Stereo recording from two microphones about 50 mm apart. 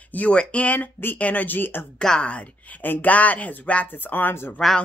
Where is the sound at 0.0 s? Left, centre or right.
Left.